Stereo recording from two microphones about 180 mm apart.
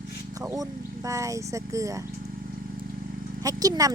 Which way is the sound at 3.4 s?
20° right (ahead or behind).